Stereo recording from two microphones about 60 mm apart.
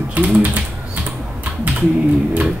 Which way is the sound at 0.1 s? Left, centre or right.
Right.